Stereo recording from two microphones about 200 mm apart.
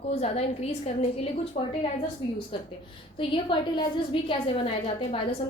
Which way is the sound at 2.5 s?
25° left (ahead or behind).